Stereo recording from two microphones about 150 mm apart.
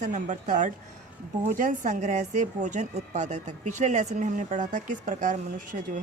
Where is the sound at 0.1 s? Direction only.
55° right (ahead or behind).